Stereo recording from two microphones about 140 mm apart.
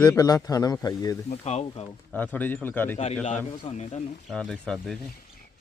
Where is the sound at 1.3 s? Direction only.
50° left (ahead or behind).